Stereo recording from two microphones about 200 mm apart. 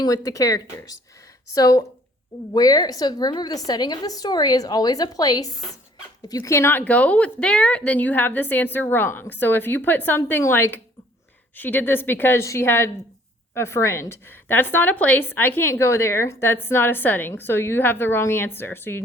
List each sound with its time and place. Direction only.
0.3 s a woman's voice: 15° left (ahead or behind)